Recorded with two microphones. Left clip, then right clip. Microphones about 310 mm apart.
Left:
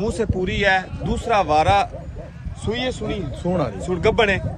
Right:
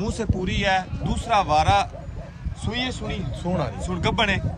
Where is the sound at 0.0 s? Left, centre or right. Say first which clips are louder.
Left 5 dB; centre.